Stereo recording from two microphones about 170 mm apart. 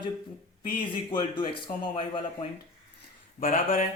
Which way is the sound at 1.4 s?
25° left (ahead or behind).